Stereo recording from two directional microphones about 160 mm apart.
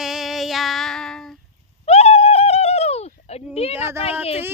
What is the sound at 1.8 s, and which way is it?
Bird, 40° left (ahead or behind).